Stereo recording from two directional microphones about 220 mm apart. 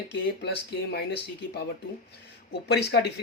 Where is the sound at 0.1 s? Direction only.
50° left (ahead or behind).